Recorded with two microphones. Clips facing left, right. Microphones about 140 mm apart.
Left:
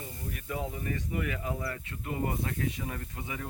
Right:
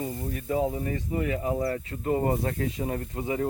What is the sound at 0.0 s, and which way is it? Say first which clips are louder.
Speech: right 9 dB; 35° right (ahead or behind).